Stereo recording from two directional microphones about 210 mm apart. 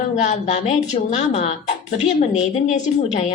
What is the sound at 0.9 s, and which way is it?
A woman's voice, 30° left (ahead or behind).